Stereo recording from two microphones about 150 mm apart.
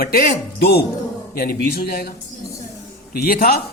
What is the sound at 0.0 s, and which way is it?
Speech, 90° left.